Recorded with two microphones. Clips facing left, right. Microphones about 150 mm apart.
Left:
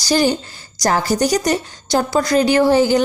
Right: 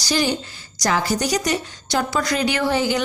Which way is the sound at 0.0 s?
40° left (ahead or behind).